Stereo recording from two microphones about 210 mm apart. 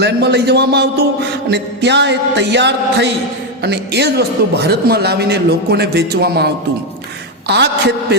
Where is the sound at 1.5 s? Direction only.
55° right (ahead or behind).